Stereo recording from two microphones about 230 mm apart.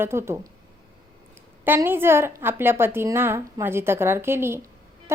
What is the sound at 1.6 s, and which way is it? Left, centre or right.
A woman's voice, centre.